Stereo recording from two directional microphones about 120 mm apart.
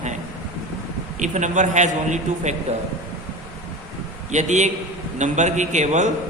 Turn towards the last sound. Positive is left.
turn(degrees=-85)